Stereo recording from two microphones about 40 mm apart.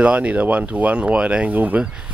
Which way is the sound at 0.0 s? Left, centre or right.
Right.